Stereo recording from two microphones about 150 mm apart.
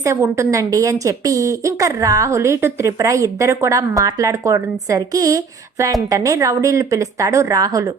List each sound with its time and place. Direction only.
0.0 s a woman's voice: 20° right (ahead or behind)